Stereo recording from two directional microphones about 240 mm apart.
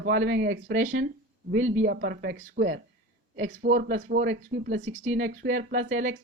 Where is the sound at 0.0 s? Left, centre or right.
Right.